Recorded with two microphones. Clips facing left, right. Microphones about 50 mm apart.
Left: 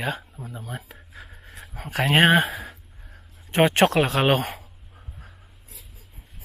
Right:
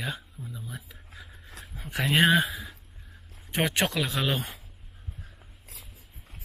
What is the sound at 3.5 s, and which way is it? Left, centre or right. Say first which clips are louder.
Speech: left 9 dB; left.